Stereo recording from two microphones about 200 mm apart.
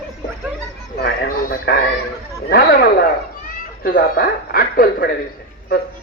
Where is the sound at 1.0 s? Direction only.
50° left (ahead or behind).